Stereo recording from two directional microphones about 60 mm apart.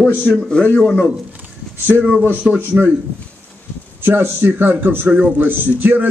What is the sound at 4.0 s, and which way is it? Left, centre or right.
A man's voice, right.